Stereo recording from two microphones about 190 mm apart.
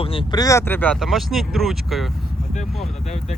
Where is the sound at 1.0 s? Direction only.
Centre (ahead or behind).